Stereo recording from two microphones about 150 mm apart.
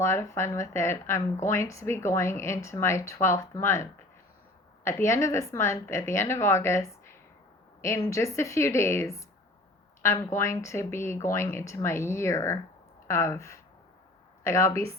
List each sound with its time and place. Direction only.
0.0 s a woman's voice: 15° left (ahead or behind)